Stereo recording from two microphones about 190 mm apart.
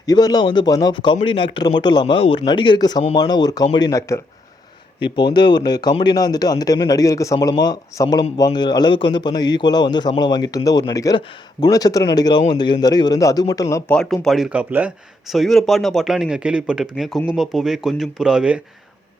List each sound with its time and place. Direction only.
0.0 s speech: 20° left (ahead or behind); by 18.6 s 5° right (ahead or behind)